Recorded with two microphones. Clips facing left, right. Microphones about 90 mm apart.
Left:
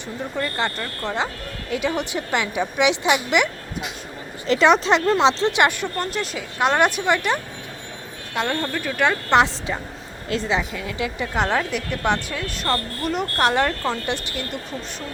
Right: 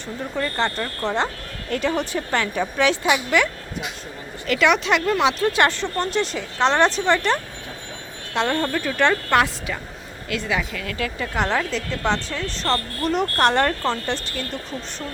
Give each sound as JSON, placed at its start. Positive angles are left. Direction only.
{"t": 0.3, "sound": "a woman's voice", "side_deg": 0}
{"t": 4.4, "sound": "speech", "side_deg": 30}
{"t": 6.0, "sound": "a woman's voice", "side_deg": 5}
{"t": 9.3, "sound": "speech", "side_deg": 20}
{"t": 10.2, "sound": "speech", "side_deg": 30}
{"t": 10.6, "sound": "a woman's voice", "side_deg": 20}